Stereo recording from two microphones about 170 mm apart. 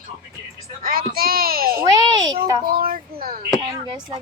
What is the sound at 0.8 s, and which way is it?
Speech, 60° right (ahead or behind).